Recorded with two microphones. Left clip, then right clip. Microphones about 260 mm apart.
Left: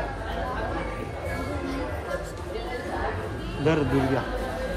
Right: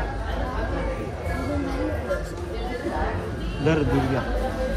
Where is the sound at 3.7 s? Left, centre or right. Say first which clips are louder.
Right 1 dB; left.